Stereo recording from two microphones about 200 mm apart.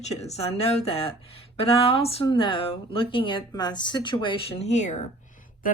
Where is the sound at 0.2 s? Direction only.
30° left (ahead or behind).